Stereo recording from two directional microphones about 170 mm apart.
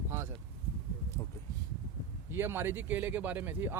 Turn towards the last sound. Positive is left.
turn(degrees=-10)  # may be behind; listen again after turning